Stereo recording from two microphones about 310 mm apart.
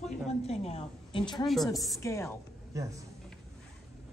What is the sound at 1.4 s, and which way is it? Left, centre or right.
Speech, centre.